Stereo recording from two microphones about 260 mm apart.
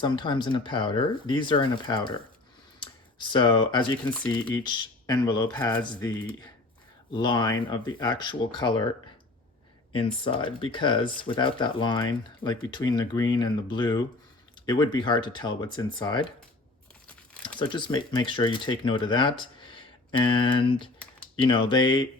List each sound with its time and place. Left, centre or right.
0.0 s speech: centre
7.1 s speech: centre
9.9 s speech: centre
17.6 s speech: centre